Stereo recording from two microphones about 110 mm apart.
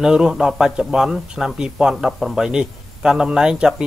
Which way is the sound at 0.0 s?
5° right (ahead or behind).